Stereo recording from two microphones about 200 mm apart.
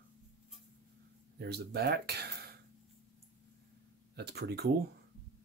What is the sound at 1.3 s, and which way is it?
Speech, 50° right (ahead or behind).